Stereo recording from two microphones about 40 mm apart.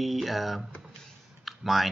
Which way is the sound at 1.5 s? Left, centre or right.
Centre.